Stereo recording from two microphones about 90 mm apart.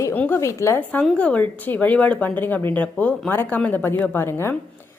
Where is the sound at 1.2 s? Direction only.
15° left (ahead or behind).